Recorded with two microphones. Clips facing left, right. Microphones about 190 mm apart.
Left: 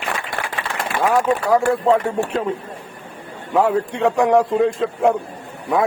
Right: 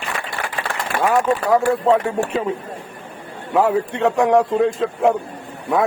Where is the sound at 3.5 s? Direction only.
Centre (ahead or behind).